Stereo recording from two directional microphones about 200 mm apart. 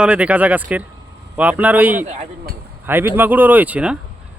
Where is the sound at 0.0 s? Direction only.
5° right (ahead or behind).